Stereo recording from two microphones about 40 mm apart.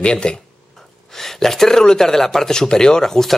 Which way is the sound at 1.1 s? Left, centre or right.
Centre.